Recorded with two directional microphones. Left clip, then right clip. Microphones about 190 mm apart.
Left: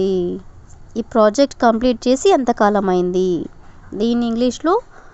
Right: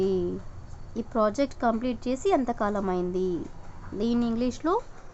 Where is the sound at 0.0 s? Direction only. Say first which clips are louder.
Left 8 dB; 35° left (ahead or behind).